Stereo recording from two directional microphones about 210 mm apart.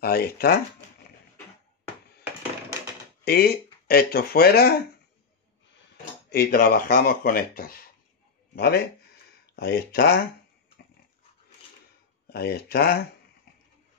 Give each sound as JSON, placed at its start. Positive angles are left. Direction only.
{"t": 0.0, "sound": "speech", "side_deg": 45}
{"t": 3.3, "sound": "speech", "side_deg": 50}
{"t": 6.3, "sound": "speech", "side_deg": 45}
{"t": 12.3, "sound": "speech", "side_deg": 50}